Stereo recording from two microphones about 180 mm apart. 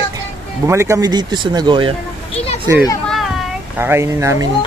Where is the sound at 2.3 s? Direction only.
35° left (ahead or behind).